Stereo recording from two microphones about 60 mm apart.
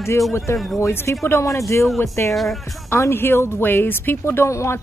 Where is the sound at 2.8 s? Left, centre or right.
Left.